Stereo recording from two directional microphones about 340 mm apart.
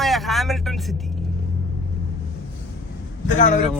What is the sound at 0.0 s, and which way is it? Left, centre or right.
Vehicle, centre.